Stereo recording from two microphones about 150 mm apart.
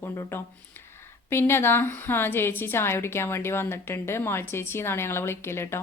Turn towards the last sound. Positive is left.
turn(degrees=15)  # may be behind; listen again after turning